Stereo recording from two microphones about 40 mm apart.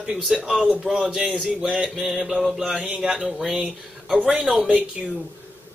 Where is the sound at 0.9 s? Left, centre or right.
Centre.